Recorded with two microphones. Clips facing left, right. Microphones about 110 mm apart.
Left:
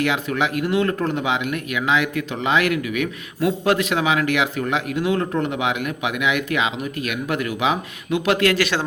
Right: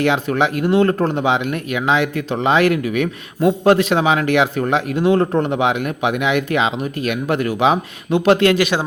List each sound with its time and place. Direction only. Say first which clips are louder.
0.0 s speech: right 5 dB; 30° right (ahead or behind); by 8.8 s 15° right (ahead or behind)